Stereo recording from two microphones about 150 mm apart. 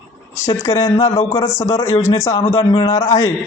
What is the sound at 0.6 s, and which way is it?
Speech, 20° left (ahead or behind).